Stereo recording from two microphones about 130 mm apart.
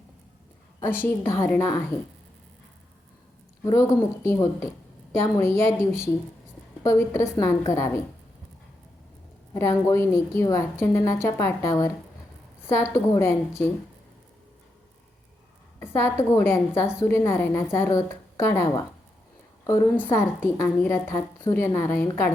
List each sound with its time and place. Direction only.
1.0 s a woman's voice: 20° left (ahead or behind)
3.6 s a woman's voice: 20° left (ahead or behind)
9.6 s a woman's voice: 20° left (ahead or behind)
16.0 s a woman's voice: 20° left (ahead or behind)